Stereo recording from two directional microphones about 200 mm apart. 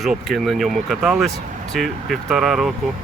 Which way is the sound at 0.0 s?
Centre (ahead or behind).